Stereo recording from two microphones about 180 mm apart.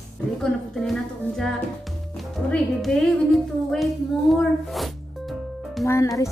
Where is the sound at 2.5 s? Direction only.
5° left (ahead or behind).